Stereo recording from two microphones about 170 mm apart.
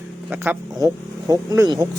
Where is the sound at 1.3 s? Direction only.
20° right (ahead or behind).